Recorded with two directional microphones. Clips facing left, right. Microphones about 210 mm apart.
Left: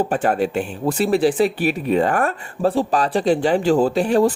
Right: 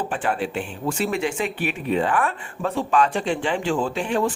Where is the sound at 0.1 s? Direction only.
40° left (ahead or behind).